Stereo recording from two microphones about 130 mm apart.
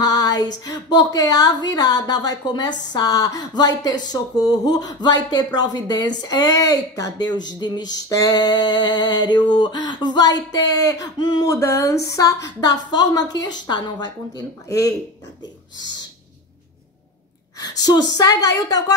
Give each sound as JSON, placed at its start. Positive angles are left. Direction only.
{"t": 0.0, "sound": "speech", "side_deg": 30}
{"t": 17.6, "sound": "a woman's voice", "side_deg": 30}